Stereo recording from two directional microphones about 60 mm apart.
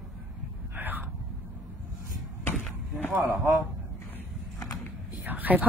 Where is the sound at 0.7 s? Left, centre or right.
Right.